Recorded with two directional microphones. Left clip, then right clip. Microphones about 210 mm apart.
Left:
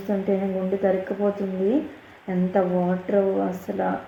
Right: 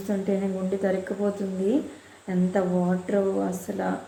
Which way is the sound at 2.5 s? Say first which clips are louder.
Left 4 dB; 10° right (ahead or behind).